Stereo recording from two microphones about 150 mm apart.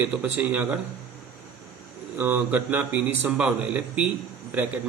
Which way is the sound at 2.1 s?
10° right (ahead or behind).